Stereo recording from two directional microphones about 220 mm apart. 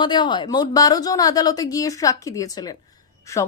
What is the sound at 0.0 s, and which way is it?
Speech, 20° left (ahead or behind).